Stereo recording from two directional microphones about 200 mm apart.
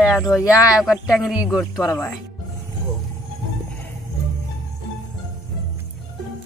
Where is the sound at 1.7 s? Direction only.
15° left (ahead or behind).